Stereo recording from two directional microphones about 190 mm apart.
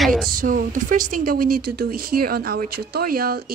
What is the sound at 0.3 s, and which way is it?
Speech, 45° right (ahead or behind).